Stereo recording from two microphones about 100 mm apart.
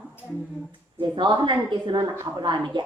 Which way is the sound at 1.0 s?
50° right (ahead or behind).